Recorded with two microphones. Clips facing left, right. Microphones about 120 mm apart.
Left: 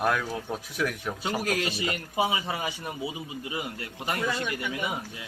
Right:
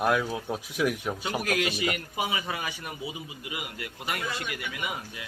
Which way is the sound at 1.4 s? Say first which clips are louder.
Right 2 dB; 30° left (ahead or behind).